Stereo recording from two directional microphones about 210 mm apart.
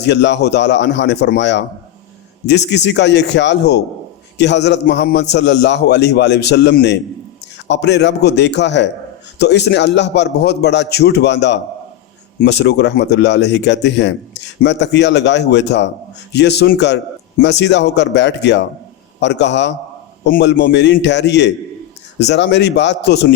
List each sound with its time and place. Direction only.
0.0 s a man's voice: 55° left (ahead or behind)